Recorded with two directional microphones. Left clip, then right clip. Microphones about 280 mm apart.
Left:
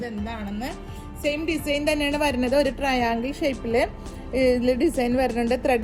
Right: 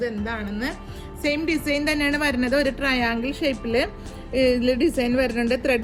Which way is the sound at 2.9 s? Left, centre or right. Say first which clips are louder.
Even; right.